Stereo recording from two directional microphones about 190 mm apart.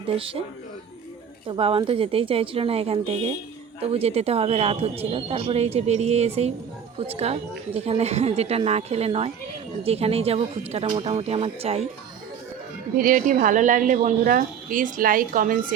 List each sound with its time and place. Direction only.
1.5 s a woman's voice: 30° right (ahead or behind)
13.0 s a woman's voice: 45° right (ahead or behind)